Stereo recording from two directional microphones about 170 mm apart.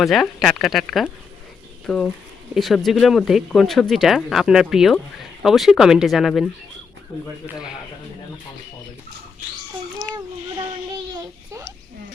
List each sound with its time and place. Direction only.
0.0 s speech: centre (ahead or behind)
10.0 s speech: 5° right (ahead or behind)
11.1 s a child's voice: 25° right (ahead or behind)